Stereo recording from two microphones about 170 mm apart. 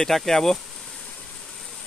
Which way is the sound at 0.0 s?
Centre (ahead or behind).